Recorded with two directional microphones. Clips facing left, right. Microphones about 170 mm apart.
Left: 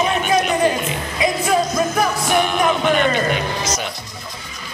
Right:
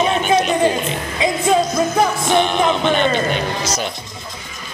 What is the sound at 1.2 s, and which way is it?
Music, 25° right (ahead or behind).